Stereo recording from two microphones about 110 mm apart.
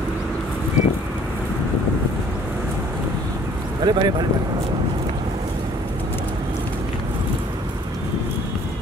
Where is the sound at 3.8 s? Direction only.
40° right (ahead or behind).